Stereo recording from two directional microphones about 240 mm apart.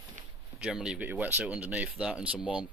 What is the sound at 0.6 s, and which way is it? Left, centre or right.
Speech, centre.